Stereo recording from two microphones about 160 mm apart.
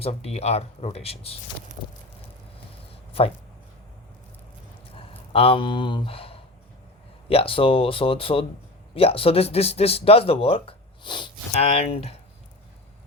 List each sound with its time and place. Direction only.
0.0 s speech: 40° left (ahead or behind)
2.9 s a sound: 35° left (ahead or behind)
4.9 s speech: 35° left (ahead or behind)
11.5 s speech: 40° left (ahead or behind)